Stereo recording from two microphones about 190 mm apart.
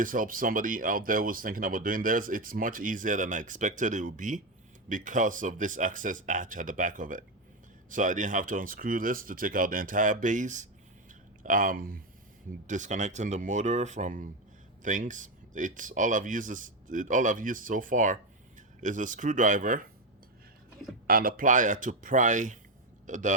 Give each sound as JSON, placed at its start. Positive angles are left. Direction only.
{"t": 0.0, "sound": "speech", "side_deg": -45}
{"t": 21.1, "sound": "speech", "side_deg": -50}